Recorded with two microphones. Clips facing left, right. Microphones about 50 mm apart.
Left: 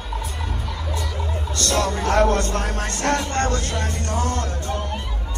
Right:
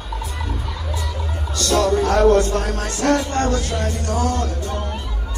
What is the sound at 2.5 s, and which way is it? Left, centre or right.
Speech, left.